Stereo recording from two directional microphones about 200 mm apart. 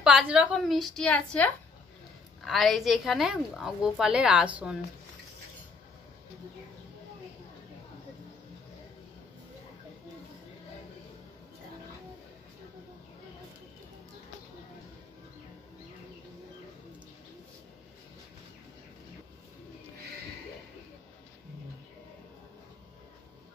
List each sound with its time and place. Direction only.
0.0 s a woman's voice: 5° right (ahead or behind)